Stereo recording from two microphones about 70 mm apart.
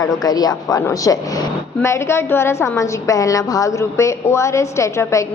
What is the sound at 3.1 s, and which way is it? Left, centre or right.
A woman's voice, left.